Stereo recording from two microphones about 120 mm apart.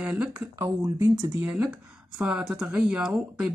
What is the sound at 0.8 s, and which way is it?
Speech, 30° right (ahead or behind).